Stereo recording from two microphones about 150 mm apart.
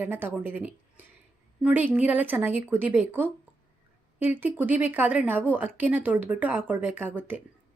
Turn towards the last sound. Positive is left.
turn(degrees=-10)  # may be behind; listen again after turning